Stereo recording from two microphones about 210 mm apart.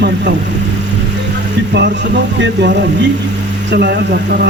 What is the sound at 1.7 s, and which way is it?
A man's voice, 55° right (ahead or behind).